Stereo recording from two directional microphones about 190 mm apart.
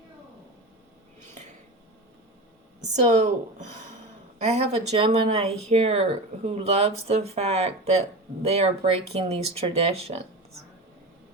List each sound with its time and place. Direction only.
2.9 s speech: 40° right (ahead or behind)